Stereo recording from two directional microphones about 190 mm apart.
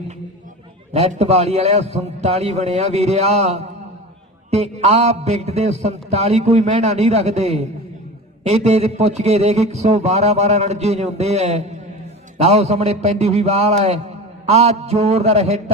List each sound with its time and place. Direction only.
0.9 s a man's voice: 35° right (ahead or behind)